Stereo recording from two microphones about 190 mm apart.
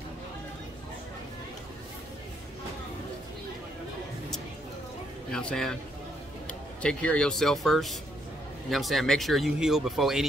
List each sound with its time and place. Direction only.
5.3 s a man's voice: 5° left (ahead or behind)
6.8 s speech: 5° left (ahead or behind)